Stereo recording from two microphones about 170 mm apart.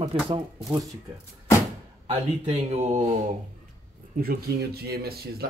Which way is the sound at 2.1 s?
40° right (ahead or behind).